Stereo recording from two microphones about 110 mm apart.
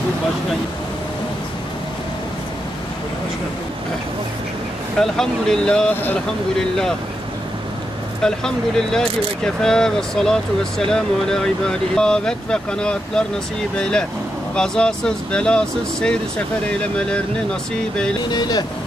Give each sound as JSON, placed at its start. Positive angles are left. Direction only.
{"t": 4.9, "sound": "speech", "side_deg": 5}
{"t": 8.2, "sound": "speech", "side_deg": 5}
{"t": 18.3, "sound": "speech", "side_deg": 40}